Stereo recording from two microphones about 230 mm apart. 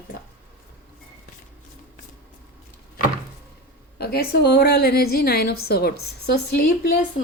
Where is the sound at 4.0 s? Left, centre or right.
Left.